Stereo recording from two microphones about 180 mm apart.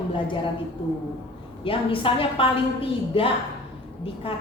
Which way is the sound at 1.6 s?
30° left (ahead or behind).